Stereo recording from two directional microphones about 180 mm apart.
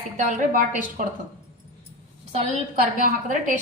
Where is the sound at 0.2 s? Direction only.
45° right (ahead or behind).